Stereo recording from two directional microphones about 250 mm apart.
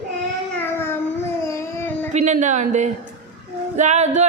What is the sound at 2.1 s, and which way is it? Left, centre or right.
A woman's voice, right.